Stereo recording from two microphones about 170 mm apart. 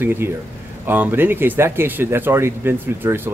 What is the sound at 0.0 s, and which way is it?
Speech, 15° right (ahead or behind).